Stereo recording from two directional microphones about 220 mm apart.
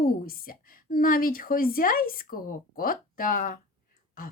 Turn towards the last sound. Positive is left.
turn(degrees=40)  # may be behind; listen again after turning